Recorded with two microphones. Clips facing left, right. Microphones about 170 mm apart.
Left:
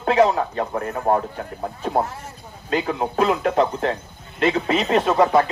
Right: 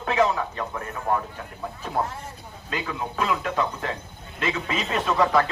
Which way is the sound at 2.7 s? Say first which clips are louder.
Left 8 dB; 35° left (ahead or behind).